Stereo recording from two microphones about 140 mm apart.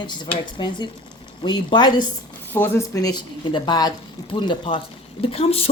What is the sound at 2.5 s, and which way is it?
A woman's voice, 15° left (ahead or behind).